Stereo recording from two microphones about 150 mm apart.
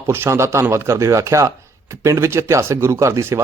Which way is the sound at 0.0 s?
15° right (ahead or behind).